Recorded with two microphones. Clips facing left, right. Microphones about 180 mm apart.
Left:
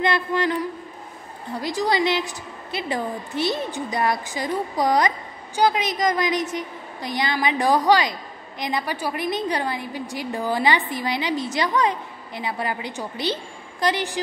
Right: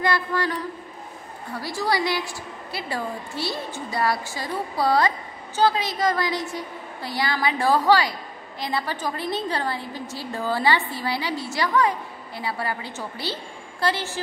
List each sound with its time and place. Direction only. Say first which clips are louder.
0.0 s a woman's voice: left 2 dB; 20° left (ahead or behind)